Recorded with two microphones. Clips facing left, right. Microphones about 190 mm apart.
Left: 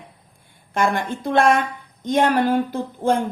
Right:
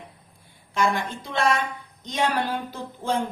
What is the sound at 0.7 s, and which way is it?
A woman's voice, 55° left (ahead or behind).